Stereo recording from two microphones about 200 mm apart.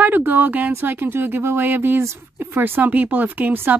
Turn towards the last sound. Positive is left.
turn(degrees=-10)  # may be behind; listen again after turning